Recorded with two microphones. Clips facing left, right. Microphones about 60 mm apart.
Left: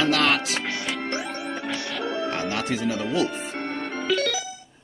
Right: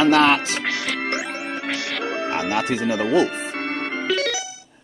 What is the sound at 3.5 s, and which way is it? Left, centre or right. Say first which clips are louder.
Music: right 4 dB; right.